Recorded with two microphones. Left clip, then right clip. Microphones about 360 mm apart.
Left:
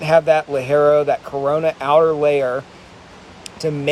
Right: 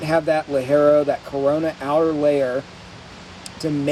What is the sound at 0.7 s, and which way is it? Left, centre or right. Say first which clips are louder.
Speech: left 2 dB; centre.